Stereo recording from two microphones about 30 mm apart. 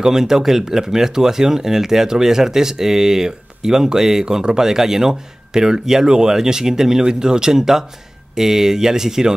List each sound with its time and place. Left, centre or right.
0.0 s speech: centre